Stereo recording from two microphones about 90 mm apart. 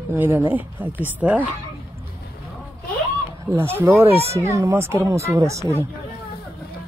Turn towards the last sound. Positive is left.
turn(degrees=-35)  # may be behind; listen again after turning